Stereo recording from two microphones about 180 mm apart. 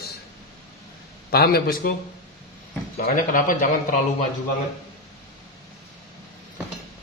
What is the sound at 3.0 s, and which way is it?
Speech, 50° left (ahead or behind).